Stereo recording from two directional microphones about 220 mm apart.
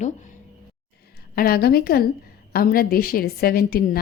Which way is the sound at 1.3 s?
45° left (ahead or behind).